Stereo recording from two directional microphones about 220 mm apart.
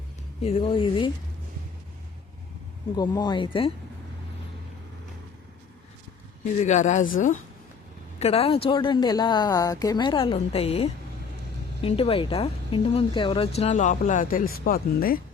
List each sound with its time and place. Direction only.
0.4 s speech: 25° left (ahead or behind)
2.9 s speech: 20° left (ahead or behind)
6.6 s speech: 30° left (ahead or behind)